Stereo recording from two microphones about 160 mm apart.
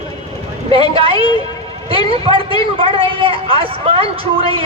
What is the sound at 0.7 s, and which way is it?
A man's voice, 35° right (ahead or behind).